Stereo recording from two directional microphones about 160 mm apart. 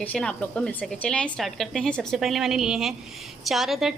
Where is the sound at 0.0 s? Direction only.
5° left (ahead or behind).